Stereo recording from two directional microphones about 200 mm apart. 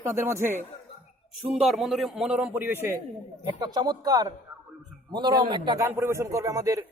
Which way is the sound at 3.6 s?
20° right (ahead or behind).